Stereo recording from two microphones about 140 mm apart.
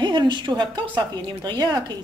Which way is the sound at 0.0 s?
35° right (ahead or behind).